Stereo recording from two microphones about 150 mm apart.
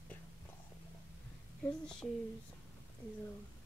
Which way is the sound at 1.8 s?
5° left (ahead or behind).